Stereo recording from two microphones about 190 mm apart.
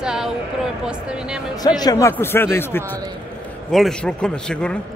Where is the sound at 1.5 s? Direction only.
20° left (ahead or behind); by 4.8 s 5° left (ahead or behind).